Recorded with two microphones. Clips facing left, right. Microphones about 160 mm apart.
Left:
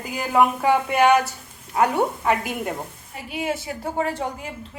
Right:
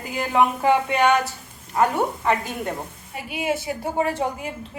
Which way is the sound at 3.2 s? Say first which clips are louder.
Right 2 dB; 10° right (ahead or behind).